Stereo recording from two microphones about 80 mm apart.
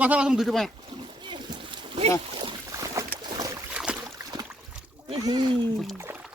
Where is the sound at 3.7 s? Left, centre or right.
Centre.